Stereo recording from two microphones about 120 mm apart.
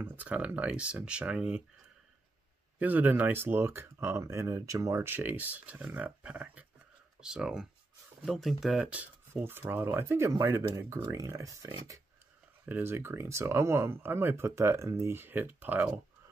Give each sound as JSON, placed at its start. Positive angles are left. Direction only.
{"t": 0.0, "sound": "speech", "side_deg": -10}
{"t": 2.8, "sound": "speech", "side_deg": -15}